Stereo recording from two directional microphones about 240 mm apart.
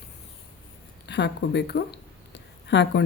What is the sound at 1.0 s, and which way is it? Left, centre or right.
Speech, left.